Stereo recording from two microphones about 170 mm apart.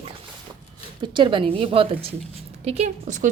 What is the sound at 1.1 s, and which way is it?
Speech, 30° right (ahead or behind).